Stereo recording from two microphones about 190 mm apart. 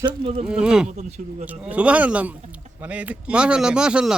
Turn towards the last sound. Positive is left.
turn(degrees=-5)  # may be behind; listen again after turning